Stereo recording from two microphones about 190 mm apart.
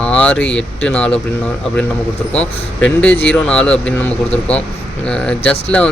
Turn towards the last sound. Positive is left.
turn(degrees=5)  # may be behind; listen again after turning